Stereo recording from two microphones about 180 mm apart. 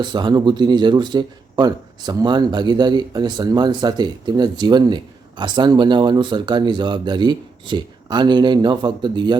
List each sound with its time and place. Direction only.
0.0 s speech: 25° right (ahead or behind)